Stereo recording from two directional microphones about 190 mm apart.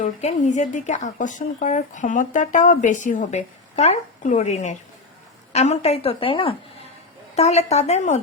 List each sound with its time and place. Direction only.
0.0 s a woman's voice: 35° left (ahead or behind)